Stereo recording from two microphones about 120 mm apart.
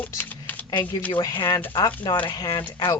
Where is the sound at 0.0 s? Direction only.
15° left (ahead or behind).